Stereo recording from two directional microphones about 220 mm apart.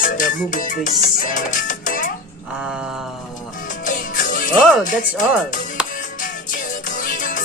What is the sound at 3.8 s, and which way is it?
Music, 35° left (ahead or behind).